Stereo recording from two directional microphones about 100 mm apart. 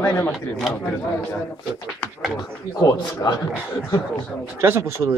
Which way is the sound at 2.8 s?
35° left (ahead or behind).